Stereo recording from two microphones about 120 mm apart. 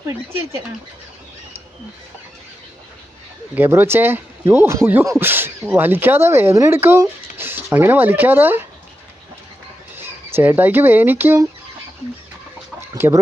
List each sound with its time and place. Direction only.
0.1 s speech: 20° right (ahead or behind)
3.5 s speech: 20° right (ahead or behind)
9.9 s speech: 15° right (ahead or behind)
13.0 s speech: 20° right (ahead or behind)